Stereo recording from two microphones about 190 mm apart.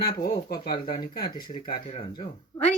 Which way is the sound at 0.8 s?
25° left (ahead or behind).